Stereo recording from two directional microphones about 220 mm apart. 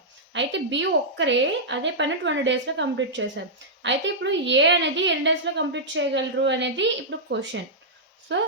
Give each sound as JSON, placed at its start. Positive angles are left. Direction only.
{"t": 0.3, "sound": "a woman's voice", "side_deg": -55}